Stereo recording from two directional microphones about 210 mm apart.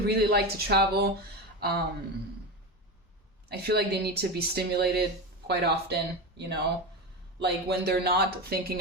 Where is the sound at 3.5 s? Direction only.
50° right (ahead or behind).